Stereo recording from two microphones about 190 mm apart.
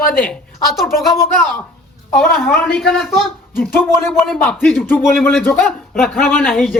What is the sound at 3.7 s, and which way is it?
Speech, 10° left (ahead or behind).